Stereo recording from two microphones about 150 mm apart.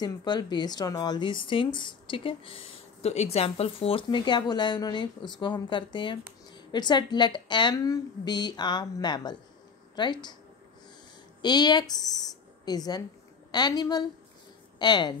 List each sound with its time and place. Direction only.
0.0 s a woman's voice: 30° left (ahead or behind)
11.4 s a woman's voice: 30° left (ahead or behind)